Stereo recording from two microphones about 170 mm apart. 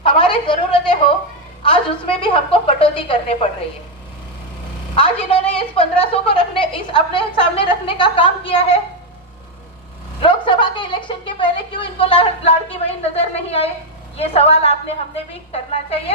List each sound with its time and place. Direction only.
0.0 s a sound: 30° left (ahead or behind)
2.5 s a woman's voice: 35° left (ahead or behind)
4.9 s a woman's voice: 30° left (ahead or behind)
10.2 s a woman's voice: 30° left (ahead or behind)